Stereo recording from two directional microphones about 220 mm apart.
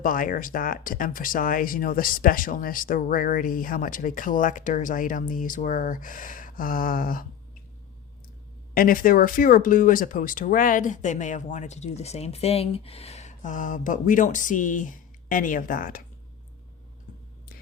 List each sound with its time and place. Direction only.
0.0 s speech: 40° left (ahead or behind)
8.7 s speech: 40° left (ahead or behind)